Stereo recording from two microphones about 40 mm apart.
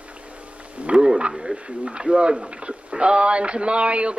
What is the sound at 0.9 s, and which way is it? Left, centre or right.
Speech, right.